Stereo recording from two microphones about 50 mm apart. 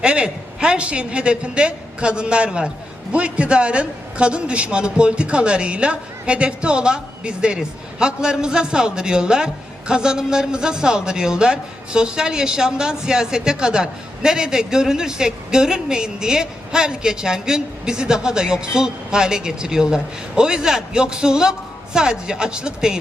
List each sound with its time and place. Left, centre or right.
0.0 s a woman's voice: right